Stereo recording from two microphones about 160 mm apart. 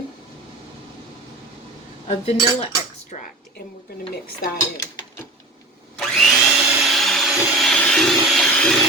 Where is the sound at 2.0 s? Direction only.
40° left (ahead or behind).